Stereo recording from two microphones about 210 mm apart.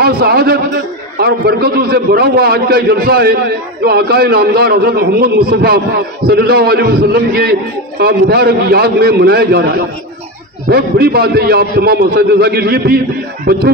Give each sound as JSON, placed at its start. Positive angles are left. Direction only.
{"t": 0.0, "sound": "a man's voice", "side_deg": -45}
{"t": 10.7, "sound": "a man's voice", "side_deg": -50}